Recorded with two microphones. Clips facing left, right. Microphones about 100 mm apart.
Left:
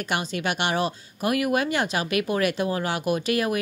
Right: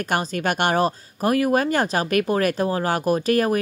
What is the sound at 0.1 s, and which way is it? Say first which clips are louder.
Speech: right 4 dB; 40° right (ahead or behind).